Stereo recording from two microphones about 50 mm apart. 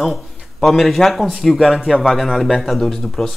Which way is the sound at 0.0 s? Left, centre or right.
Centre.